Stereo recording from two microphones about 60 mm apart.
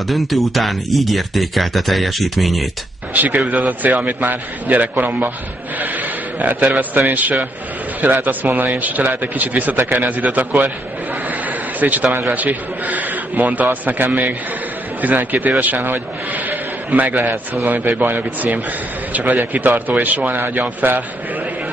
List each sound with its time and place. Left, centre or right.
0.0 s speech: centre
3.1 s a man's voice: right
11.2 s a sound: right
12.3 s a man's voice: right